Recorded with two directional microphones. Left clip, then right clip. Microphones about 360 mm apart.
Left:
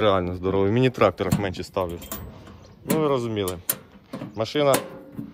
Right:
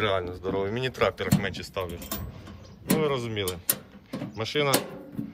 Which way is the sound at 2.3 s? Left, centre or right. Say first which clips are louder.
Left 1 dB; centre.